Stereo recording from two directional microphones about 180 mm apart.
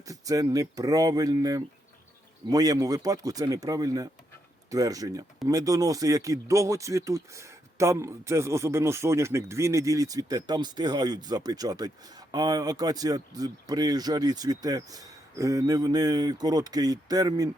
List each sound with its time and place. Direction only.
0.1 s speech: 20° right (ahead or behind)